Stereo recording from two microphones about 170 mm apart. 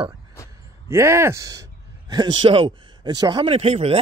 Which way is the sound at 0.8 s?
15° right (ahead or behind).